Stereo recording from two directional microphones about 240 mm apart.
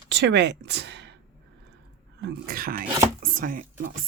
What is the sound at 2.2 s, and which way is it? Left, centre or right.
Speech, right.